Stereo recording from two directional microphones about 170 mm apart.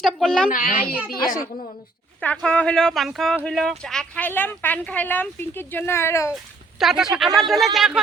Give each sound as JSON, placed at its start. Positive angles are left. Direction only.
{"t": 0.0, "sound": "a sound", "side_deg": 0}
{"t": 0.5, "sound": "a child's voice", "side_deg": 50}
{"t": 2.2, "sound": "speech", "side_deg": 5}
{"t": 6.3, "sound": "speech", "side_deg": 0}